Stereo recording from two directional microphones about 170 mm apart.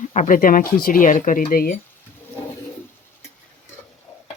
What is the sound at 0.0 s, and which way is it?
Speech, 45° left (ahead or behind).